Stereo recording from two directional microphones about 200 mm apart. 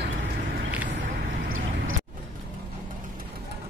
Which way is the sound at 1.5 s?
85° right.